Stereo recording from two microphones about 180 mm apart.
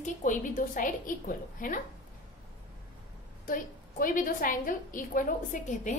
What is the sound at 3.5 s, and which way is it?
A woman's voice, 50° left (ahead or behind).